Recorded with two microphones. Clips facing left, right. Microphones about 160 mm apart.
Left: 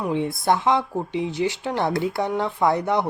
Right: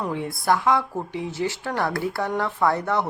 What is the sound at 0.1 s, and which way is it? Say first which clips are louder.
Speech: left 3 dB; 20° left (ahead or behind).